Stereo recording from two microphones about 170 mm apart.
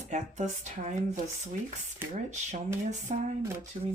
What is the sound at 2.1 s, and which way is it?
Speech, 45° right (ahead or behind).